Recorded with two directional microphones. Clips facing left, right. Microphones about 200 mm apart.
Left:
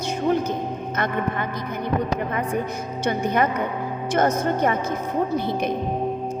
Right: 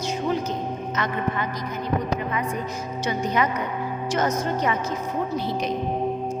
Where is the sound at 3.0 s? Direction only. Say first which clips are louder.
Left 3 dB; 55° left (ahead or behind).